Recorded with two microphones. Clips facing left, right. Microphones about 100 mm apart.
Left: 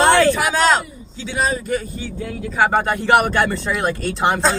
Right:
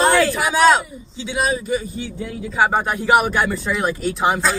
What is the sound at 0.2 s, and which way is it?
A man's voice, 10° right (ahead or behind).